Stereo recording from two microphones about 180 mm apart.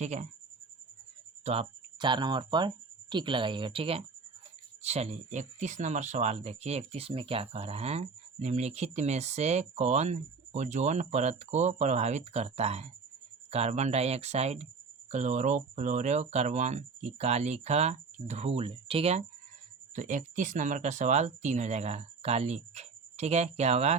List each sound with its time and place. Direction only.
0.0 s speech: 40° right (ahead or behind)
1.5 s speech: 30° right (ahead or behind)
20.0 s speech: 45° right (ahead or behind)